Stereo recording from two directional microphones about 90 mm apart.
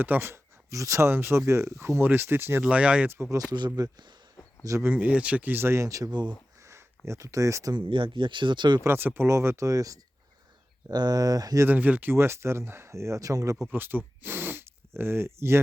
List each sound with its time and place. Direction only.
0.0 s speech: 25° right (ahead or behind)
2.6 s speech: 15° right (ahead or behind)
3.1 s speech: 30° right (ahead or behind)
3.8 s speech: 50° right (ahead or behind)
4.6 s speech: 35° right (ahead or behind)
4.9 s speech: 15° right (ahead or behind); by 6.1 s 35° right (ahead or behind)
6.1 s speech: 55° right (ahead or behind)
6.6 s a sound: 30° right (ahead or behind)
7.9 s speech: 70° right (ahead or behind)
8.8 s speech: 25° right (ahead or behind); by 11.6 s 45° right (ahead or behind)
11.6 s speech: 20° right (ahead or behind)
12.1 s speech: 30° right (ahead or behind)
13.7 s speech: 20° right (ahead or behind)